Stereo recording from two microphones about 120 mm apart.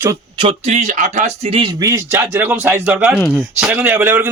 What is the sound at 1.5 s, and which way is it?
Speech, 45° right (ahead or behind).